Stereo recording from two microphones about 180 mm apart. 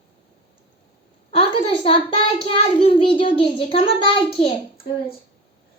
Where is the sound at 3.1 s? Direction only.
30° left (ahead or behind).